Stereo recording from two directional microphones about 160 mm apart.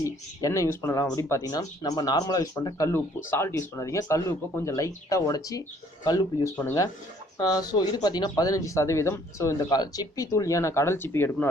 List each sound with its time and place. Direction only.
0.0 s speech: 20° left (ahead or behind)